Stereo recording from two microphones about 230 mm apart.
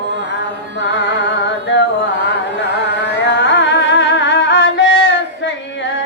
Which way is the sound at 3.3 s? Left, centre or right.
Left.